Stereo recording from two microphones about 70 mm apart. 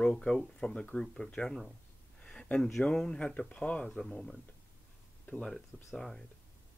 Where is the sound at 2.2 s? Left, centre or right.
Centre.